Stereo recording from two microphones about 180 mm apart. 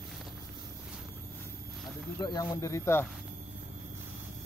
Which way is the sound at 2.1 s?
20° left (ahead or behind).